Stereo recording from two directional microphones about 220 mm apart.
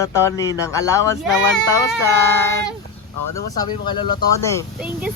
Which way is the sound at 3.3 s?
20° left (ahead or behind).